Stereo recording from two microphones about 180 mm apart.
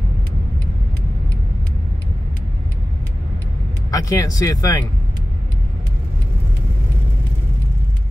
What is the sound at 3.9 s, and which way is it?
Speech, 20° left (ahead or behind).